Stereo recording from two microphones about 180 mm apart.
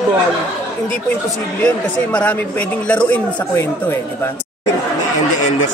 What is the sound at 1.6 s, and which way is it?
Speech, 5° left (ahead or behind).